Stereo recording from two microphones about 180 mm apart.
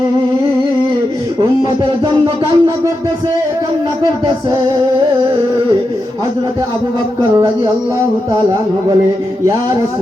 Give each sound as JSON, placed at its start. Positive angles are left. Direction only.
{"t": 1.8, "sound": "music", "side_deg": -25}